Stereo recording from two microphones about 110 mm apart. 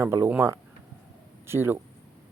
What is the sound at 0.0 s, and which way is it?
Speech, 20° right (ahead or behind).